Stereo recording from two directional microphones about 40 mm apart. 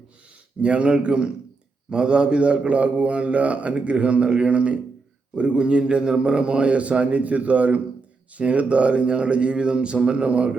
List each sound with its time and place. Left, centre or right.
0.6 s a man's voice: right